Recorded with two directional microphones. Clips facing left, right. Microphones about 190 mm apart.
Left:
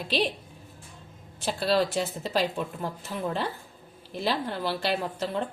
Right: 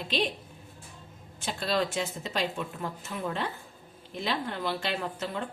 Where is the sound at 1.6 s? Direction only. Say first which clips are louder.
Left 4 dB; 35° left (ahead or behind).